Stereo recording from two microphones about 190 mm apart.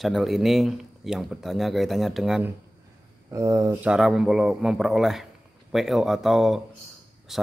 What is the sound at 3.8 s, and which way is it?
A man's voice, 5° right (ahead or behind).